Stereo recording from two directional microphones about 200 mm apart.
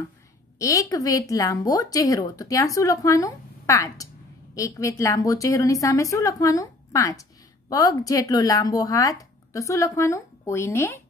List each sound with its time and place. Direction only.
0.6 s a woman's voice: 15° left (ahead or behind)